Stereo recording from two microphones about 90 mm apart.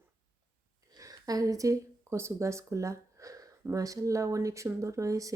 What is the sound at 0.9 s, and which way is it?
Speech, 40° right (ahead or behind).